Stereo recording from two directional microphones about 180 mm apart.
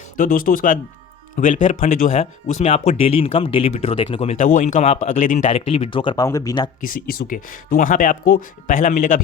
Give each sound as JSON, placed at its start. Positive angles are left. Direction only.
{"t": 0.2, "sound": "speech", "side_deg": 50}
{"t": 4.4, "sound": "speech", "side_deg": 45}
{"t": 6.8, "sound": "speech", "side_deg": 55}